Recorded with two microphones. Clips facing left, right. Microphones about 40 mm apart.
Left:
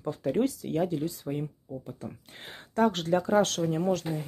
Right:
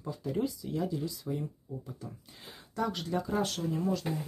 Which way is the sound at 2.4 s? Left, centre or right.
Left.